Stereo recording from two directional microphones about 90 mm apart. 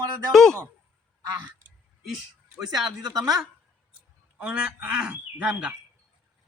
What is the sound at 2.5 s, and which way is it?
Speech, 5° right (ahead or behind).